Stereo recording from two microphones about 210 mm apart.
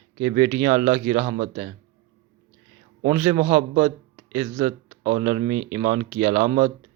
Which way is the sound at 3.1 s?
25° right (ahead or behind).